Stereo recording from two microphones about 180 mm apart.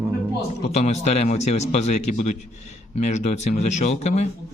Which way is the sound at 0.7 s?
35° left (ahead or behind).